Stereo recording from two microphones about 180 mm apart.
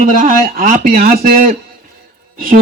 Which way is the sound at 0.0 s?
50° right (ahead or behind).